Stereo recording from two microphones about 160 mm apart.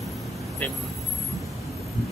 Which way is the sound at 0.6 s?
10° left (ahead or behind).